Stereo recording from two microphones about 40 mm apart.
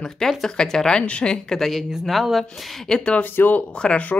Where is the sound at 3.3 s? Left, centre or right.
Left.